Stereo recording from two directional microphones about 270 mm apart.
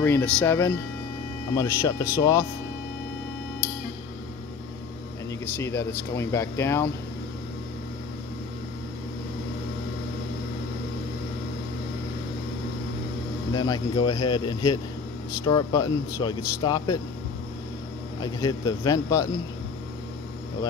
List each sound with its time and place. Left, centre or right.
0.0 s speech: centre
5.4 s speech: centre
13.5 s speech: centre
18.9 s speech: centre